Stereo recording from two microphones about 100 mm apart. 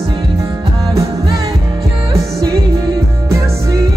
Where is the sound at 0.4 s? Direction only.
35° right (ahead or behind).